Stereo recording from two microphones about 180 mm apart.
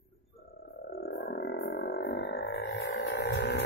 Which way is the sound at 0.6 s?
60° left (ahead or behind).